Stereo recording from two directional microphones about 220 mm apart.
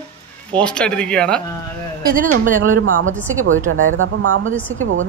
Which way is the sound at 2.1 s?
35° right (ahead or behind).